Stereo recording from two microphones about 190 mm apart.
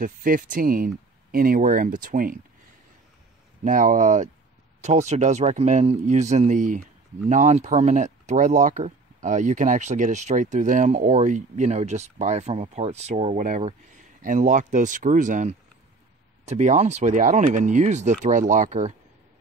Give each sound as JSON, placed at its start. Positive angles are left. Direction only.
{"t": 0.0, "sound": "speech", "side_deg": -45}
{"t": 3.6, "sound": "speech", "side_deg": -45}